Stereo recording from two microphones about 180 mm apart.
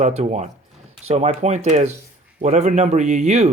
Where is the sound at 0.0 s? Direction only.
40° right (ahead or behind).